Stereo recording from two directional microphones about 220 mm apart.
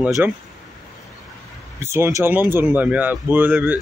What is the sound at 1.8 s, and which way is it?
Speech, 10° right (ahead or behind).